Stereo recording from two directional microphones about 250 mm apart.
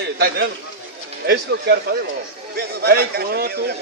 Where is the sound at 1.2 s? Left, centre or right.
Right.